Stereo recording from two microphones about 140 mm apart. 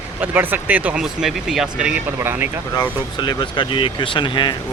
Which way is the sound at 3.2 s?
35° left (ahead or behind).